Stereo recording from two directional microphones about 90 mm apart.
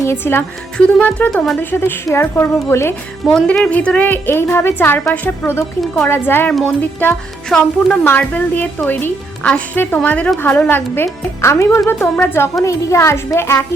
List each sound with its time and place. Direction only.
0.0 s a woman's voice: 30° left (ahead or behind)
0.8 s a woman's voice: 15° left (ahead or behind)
1.3 s speech: 5° left (ahead or behind)
1.7 s a woman's voice: 25° left (ahead or behind)
3.2 s a woman's voice: 10° left (ahead or behind)
6.5 s a woman's voice: 5° left (ahead or behind)
8.0 s a woman's voice: 20° left (ahead or behind)
12.6 s a woman's voice: 35° left (ahead or behind)